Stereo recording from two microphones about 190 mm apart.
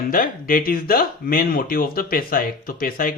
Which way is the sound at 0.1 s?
45° left (ahead or behind).